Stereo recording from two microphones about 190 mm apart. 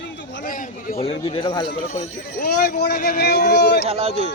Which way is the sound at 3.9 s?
30° right (ahead or behind).